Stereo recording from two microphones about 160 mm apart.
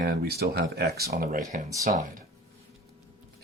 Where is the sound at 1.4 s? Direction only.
20° right (ahead or behind).